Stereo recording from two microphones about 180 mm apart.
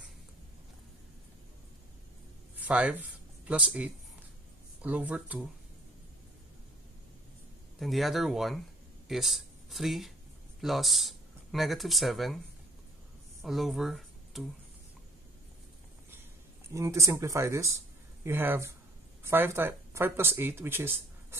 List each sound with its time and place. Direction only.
2.5 s speech: 10° right (ahead or behind)
7.8 s speech: centre (ahead or behind)
13.4 s speech: centre (ahead or behind)
16.7 s speech: 15° right (ahead or behind)